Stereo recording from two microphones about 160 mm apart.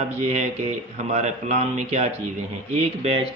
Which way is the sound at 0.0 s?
45° right (ahead or behind).